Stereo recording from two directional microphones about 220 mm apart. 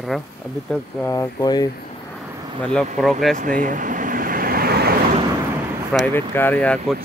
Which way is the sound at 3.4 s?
35° right (ahead or behind).